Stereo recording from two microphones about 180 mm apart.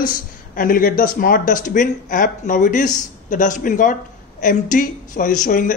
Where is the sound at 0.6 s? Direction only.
50° left (ahead or behind).